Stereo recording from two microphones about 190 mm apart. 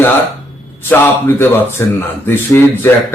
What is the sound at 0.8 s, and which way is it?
Speech, 10° left (ahead or behind).